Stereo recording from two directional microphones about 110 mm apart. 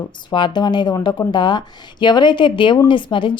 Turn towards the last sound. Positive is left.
turn(degrees=50)  # may be behind; listen again after turning